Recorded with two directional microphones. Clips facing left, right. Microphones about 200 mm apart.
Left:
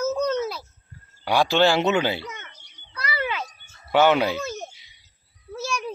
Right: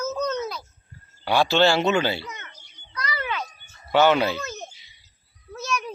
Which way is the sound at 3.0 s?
10° left (ahead or behind).